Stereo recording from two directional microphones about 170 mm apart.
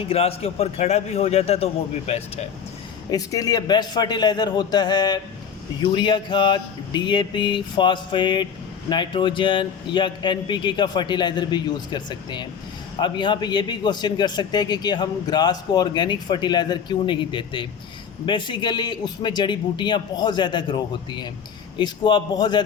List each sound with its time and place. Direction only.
0.0 s a man's voice: 35° left (ahead or behind)
3.1 s a man's voice: 20° left (ahead or behind)